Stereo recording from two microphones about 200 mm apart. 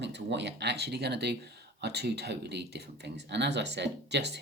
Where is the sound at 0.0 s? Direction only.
60° right (ahead or behind).